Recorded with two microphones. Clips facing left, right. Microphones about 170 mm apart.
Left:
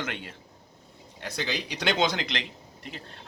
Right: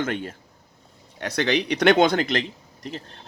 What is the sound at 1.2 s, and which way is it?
Speech, 70° right (ahead or behind).